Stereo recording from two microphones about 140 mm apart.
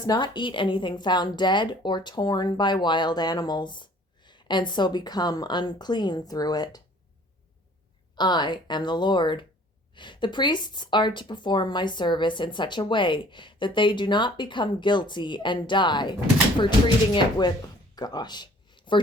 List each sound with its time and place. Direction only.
0.0 s a woman's voice: 30° left (ahead or behind)
8.1 s a woman's voice: 30° left (ahead or behind)
17.2 s speech: 30° left (ahead or behind)